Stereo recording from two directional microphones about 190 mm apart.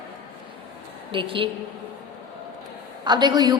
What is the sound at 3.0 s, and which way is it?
Speech, 20° right (ahead or behind).